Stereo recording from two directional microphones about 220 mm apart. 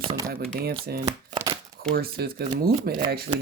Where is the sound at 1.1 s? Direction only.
25° right (ahead or behind).